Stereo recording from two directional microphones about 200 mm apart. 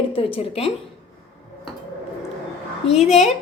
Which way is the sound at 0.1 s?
30° left (ahead or behind).